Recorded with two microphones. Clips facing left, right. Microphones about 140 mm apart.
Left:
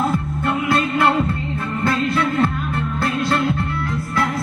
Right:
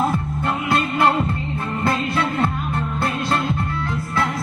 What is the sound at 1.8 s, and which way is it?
Music, 25° right (ahead or behind).